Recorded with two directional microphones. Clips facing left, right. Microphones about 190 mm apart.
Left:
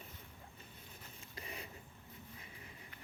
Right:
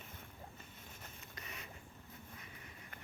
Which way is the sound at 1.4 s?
30° left (ahead or behind).